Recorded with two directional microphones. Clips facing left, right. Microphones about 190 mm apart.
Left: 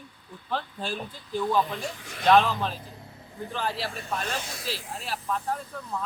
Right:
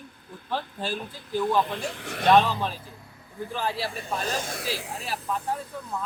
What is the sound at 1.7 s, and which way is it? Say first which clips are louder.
Speech: right 3 dB; 65° right (ahead or behind).